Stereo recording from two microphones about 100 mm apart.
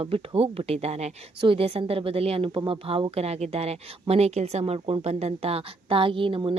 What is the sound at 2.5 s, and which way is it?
A woman's voice, 65° right (ahead or behind).